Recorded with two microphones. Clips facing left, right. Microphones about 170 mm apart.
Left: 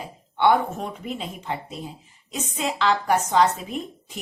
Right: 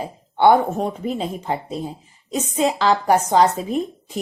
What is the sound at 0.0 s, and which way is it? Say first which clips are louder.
A woman's voice: right 5 dB; 35° right (ahead or behind).